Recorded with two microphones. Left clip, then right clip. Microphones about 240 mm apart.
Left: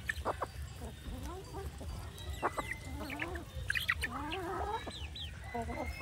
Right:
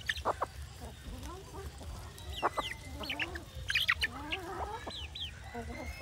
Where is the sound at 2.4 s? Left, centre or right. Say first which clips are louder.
Right 3 dB; right.